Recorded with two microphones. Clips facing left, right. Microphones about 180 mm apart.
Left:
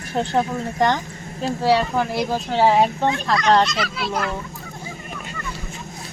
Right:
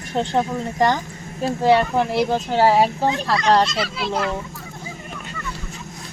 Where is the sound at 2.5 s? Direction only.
10° right (ahead or behind).